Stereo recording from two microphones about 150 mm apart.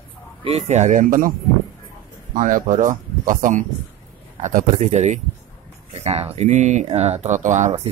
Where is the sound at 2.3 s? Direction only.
60° right (ahead or behind).